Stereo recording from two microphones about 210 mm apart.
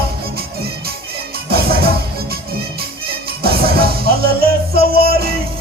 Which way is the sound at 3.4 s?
50° right (ahead or behind).